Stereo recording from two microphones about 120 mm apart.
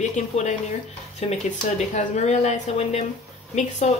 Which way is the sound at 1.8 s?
75° left (ahead or behind).